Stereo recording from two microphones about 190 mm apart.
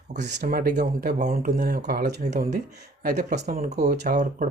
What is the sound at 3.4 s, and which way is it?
Speech, 50° right (ahead or behind).